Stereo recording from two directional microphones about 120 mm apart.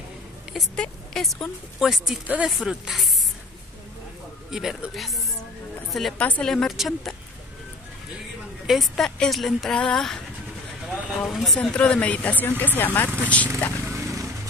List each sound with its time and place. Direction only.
0.7 s speech: centre (ahead or behind)
4.5 s speech: 5° right (ahead or behind)
6.2 s speech: 10° left (ahead or behind)
6.5 s speech: centre (ahead or behind)
8.6 s speech: centre (ahead or behind)
11.2 s speech: centre (ahead or behind)
13.8 s a sound: 25° right (ahead or behind)